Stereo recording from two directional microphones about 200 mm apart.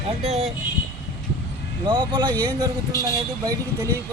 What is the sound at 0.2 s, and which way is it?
Speech, 30° right (ahead or behind).